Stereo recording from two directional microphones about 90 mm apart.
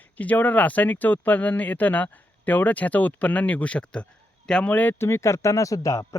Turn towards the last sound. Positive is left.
turn(degrees=40)  # may be behind; listen again after turning